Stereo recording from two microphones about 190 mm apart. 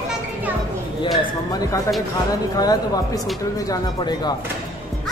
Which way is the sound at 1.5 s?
20° left (ahead or behind).